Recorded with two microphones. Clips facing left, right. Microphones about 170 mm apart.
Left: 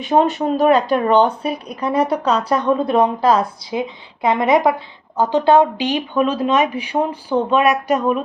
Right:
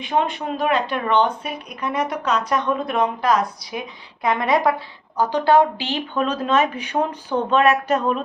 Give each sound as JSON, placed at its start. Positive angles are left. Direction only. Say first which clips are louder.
{"t": 0.0, "sound": "speech", "louder": "left 6 dB", "side_deg": 40}